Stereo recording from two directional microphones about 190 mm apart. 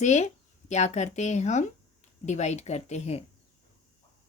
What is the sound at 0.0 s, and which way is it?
Speech, 35° left (ahead or behind).